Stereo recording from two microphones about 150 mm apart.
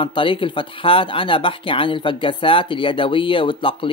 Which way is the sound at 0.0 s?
35° left (ahead or behind).